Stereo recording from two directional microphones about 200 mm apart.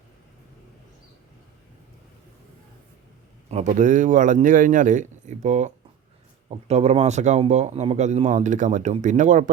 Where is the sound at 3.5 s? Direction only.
35° right (ahead or behind).